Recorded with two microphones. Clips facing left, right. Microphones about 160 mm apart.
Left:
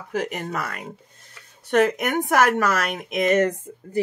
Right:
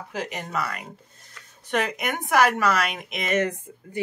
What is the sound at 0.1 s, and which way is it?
Speech, 50° left (ahead or behind).